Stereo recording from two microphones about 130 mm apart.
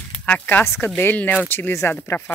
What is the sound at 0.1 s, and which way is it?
Speech, 10° left (ahead or behind).